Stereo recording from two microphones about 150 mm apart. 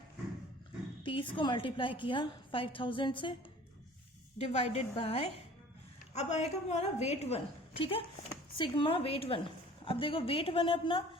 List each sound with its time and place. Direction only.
1.0 s a woman's voice: 35° left (ahead or behind)
4.4 s a woman's voice: 45° left (ahead or behind)